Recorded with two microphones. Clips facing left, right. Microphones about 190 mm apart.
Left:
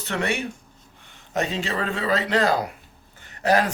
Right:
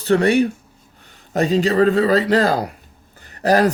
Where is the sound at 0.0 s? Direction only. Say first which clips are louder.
Right 11 dB; 35° right (ahead or behind).